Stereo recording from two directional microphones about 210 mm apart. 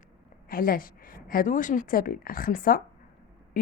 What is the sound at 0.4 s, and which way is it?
A woman's voice, 45° left (ahead or behind).